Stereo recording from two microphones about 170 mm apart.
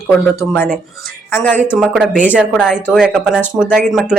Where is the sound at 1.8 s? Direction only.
5° right (ahead or behind).